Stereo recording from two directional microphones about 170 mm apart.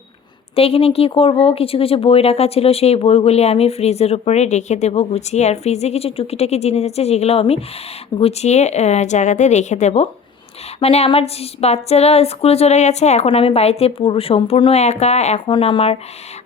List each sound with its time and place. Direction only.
0.5 s speech: 35° left (ahead or behind)